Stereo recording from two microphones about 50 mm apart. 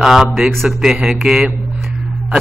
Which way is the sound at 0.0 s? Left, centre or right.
Centre.